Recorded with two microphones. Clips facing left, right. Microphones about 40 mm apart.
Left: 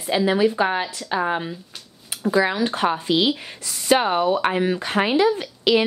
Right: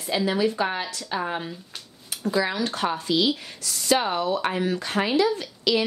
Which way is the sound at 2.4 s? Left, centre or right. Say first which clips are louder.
Left 5 dB; left.